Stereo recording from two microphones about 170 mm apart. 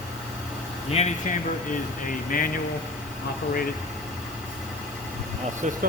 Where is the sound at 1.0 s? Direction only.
40° left (ahead or behind).